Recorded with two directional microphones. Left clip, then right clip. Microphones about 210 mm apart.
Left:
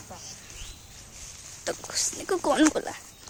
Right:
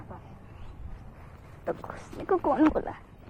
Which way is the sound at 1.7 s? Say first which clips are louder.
Left 4 dB; 40° left (ahead or behind).